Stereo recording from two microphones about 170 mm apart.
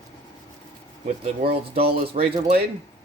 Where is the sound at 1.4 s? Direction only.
35° right (ahead or behind).